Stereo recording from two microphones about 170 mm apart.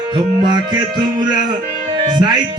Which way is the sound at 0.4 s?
25° right (ahead or behind).